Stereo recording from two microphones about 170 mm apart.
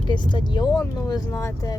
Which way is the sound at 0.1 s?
25° left (ahead or behind).